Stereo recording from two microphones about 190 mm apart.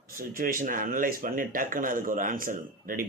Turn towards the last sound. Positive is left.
turn(degrees=-45)  # may be behind; listen again after turning